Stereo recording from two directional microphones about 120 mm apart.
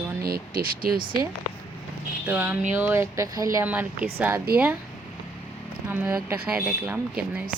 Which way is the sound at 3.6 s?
15° right (ahead or behind).